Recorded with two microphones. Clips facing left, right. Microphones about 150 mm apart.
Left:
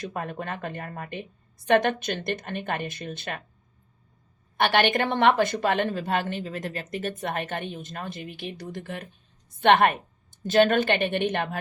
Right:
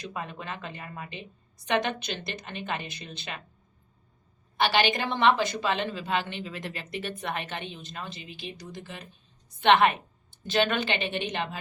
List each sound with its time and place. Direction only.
0.0 s a woman's voice: 50° left (ahead or behind)
4.5 s a woman's voice: 55° left (ahead or behind)